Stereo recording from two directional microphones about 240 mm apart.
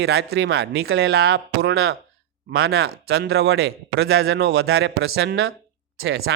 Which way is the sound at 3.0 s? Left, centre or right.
Right.